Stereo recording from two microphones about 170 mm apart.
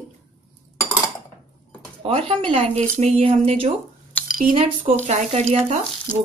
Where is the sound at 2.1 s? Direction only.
35° right (ahead or behind).